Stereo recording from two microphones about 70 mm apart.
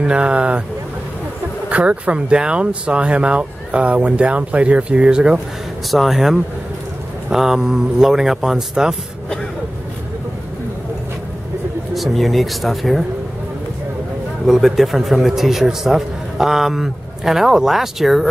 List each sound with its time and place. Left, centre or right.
0.0 s speech: centre
1.7 s speech: centre
5.9 s a man's voice: centre
11.9 s a man's voice: centre
14.4 s a man's voice: centre